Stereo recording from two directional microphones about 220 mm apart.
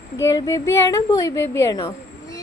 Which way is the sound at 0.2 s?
15° left (ahead or behind).